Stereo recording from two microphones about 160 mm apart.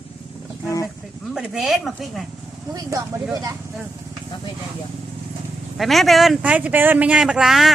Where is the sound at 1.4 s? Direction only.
Centre (ahead or behind).